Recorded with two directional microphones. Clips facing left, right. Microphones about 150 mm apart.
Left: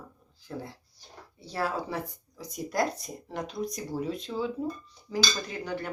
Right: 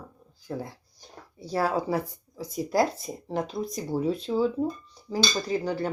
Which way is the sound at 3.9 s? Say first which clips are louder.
Right 6 dB; 35° right (ahead or behind).